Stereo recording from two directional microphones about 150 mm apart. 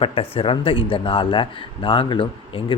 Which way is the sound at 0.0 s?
40° left (ahead or behind).